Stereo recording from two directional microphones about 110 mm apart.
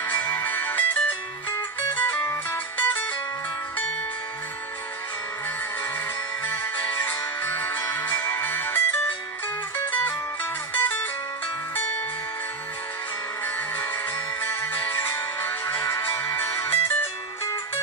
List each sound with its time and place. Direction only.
0.0 s music: 15° left (ahead or behind)
6.4 s music: 15° left (ahead or behind)
14.4 s music: 20° left (ahead or behind)